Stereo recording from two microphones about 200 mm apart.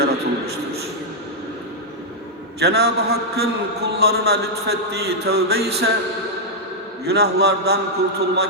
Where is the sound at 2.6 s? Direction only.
55° right (ahead or behind).